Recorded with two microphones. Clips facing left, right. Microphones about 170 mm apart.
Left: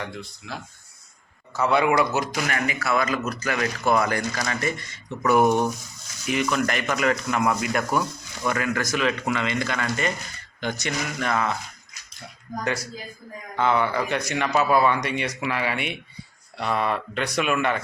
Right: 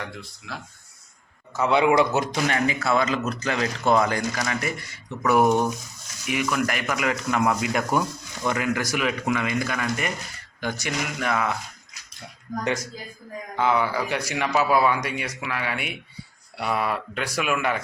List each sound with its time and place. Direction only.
0.0 s speech: centre (ahead or behind)
1.5 s speech: 20° right (ahead or behind)
13.6 s speech: 10° right (ahead or behind)